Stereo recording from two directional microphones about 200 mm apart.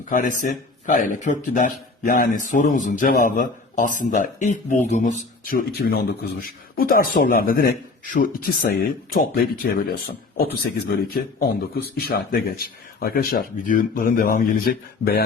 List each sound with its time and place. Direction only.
0.1 s a man's voice: 40° left (ahead or behind)